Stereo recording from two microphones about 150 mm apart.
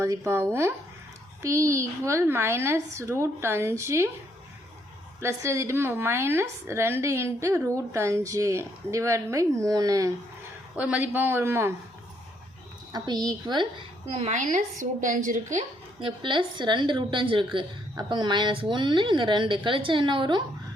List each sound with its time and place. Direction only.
0.0 s a woman's voice: 20° right (ahead or behind)
5.2 s a woman's voice: 20° right (ahead or behind)
10.8 s a woman's voice: 10° right (ahead or behind)
12.9 s a woman's voice: 25° right (ahead or behind); by 15.6 s 60° right (ahead or behind)
16.0 s a woman's voice: 35° right (ahead or behind)